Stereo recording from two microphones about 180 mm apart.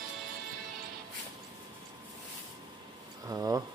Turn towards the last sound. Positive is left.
turn(degrees=-20)  # may be behind; listen again after turning